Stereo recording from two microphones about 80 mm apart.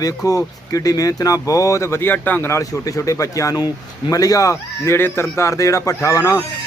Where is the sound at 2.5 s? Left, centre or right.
Left.